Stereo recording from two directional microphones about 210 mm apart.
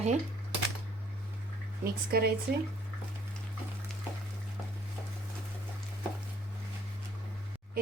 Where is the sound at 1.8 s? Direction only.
45° right (ahead or behind).